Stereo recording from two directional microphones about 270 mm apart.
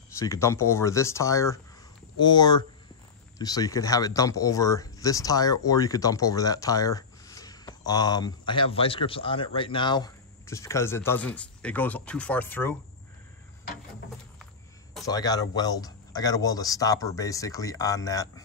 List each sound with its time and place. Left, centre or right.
0.2 s speech: centre
15.0 s speech: centre